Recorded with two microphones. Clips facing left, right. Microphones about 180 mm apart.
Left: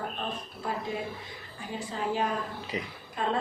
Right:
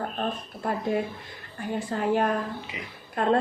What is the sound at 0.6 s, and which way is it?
A woman's voice, 55° right (ahead or behind).